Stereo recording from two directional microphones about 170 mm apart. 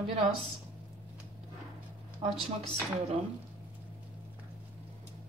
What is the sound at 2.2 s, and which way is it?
Speech, 35° right (ahead or behind).